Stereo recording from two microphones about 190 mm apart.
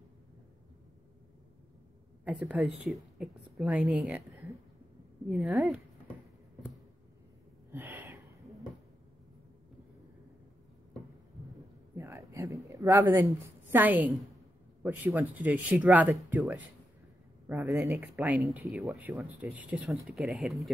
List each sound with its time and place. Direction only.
2.4 s speech: 5° right (ahead or behind)
5.3 s speech: 5° right (ahead or behind)
7.7 s gasp: 10° right (ahead or behind)
11.9 s a sound: 15° right (ahead or behind)
14.8 s speech: 10° right (ahead or behind)